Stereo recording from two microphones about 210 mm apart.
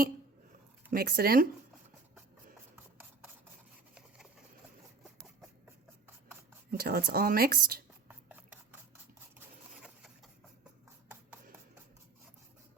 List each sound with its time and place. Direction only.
0.9 s speech: 45° right (ahead or behind)
2.7 s rub: 10° right (ahead or behind)
6.7 s speech: 45° right (ahead or behind)
8.0 s a sound: 10° right (ahead or behind)
9.4 s printer: 5° right (ahead or behind)